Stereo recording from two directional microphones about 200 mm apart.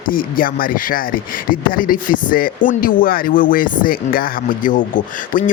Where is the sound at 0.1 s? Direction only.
45° left (ahead or behind).